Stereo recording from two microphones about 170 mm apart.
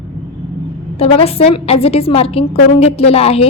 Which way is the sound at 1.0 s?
35° left (ahead or behind).